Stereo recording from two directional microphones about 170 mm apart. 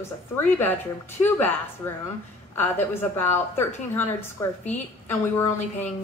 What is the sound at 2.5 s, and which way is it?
A woman's voice, 15° left (ahead or behind).